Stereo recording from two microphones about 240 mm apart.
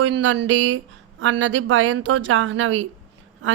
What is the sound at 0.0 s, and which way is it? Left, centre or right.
Speech, right.